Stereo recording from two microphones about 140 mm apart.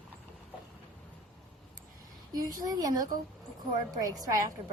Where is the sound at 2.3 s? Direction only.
25° right (ahead or behind).